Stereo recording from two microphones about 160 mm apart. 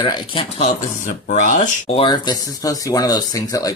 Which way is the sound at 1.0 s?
50° left (ahead or behind).